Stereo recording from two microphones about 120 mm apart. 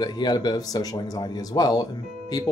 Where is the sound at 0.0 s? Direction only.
35° left (ahead or behind).